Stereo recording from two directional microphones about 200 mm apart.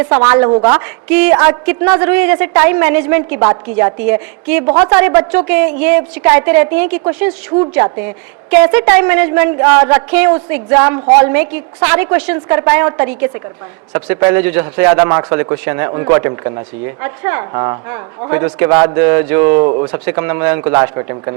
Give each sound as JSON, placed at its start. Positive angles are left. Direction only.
{"t": 0.0, "sound": "a man's voice", "side_deg": -10}
{"t": 19.5, "sound": "speech", "side_deg": -25}
{"t": 19.9, "sound": "a man's voice", "side_deg": -10}